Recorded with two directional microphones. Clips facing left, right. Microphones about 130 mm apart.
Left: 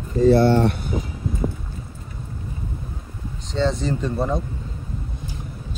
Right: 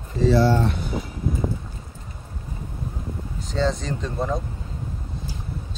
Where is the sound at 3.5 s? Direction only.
Centre (ahead or behind).